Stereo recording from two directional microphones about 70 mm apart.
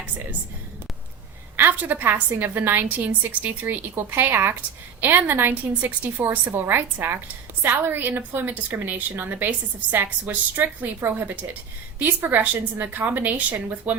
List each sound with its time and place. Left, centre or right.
1.5 s a woman's voice: right